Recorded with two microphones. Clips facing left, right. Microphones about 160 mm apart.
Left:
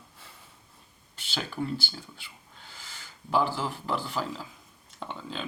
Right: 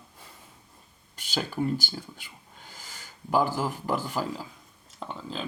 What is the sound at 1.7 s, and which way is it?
Speech, 45° right (ahead or behind).